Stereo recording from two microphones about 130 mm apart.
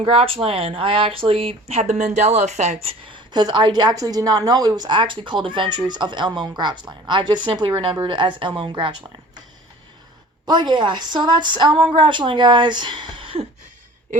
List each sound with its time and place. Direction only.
0.0 s speech: 45° right (ahead or behind)
10.4 s speech: 35° right (ahead or behind)